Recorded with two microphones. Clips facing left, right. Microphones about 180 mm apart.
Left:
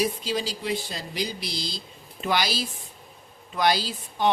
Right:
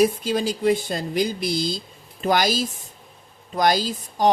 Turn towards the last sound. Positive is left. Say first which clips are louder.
# right 4 dB
turn(degrees=-40)  # may be behind; listen again after turning